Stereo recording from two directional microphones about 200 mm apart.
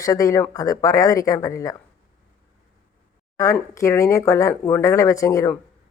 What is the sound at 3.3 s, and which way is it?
Speech, 15° left (ahead or behind).